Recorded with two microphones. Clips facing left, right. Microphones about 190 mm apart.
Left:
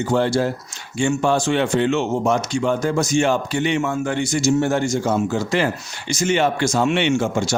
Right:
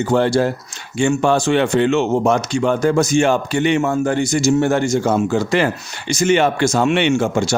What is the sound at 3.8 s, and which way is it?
Speech, 40° right (ahead or behind).